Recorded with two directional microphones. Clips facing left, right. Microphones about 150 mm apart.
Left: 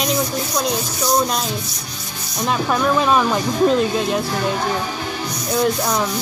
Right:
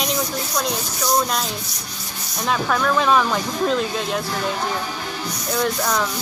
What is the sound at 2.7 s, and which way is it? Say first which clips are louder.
Speech: left 1 dB; 15° left (ahead or behind).